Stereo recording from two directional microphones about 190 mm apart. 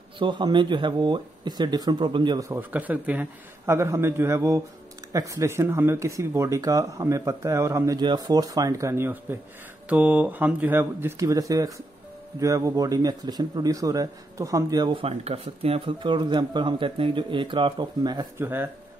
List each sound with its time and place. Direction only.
0.2 s speech: 25° right (ahead or behind)